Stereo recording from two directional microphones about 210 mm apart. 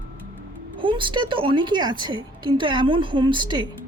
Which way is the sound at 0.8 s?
25° right (ahead or behind).